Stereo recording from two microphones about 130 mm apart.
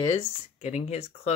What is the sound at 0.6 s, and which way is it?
Speech, 60° left (ahead or behind).